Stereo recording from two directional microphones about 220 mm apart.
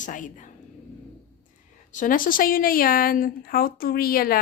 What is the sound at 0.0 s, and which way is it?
Speech, 35° left (ahead or behind).